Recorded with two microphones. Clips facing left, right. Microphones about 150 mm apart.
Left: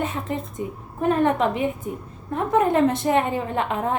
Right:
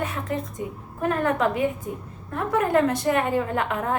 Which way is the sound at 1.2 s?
25° left (ahead or behind).